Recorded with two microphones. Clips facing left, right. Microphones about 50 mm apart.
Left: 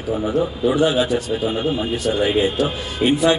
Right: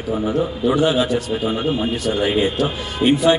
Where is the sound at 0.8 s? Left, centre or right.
Centre.